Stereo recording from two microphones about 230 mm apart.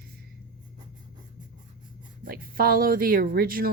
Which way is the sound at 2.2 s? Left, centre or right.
Right.